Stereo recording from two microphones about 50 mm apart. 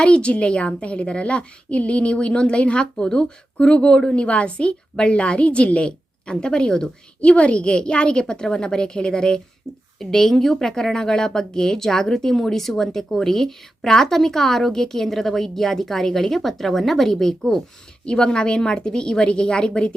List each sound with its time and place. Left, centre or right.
0.0 s a woman's voice: left